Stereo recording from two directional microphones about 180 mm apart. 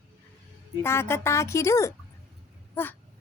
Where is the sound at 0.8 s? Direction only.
15° left (ahead or behind).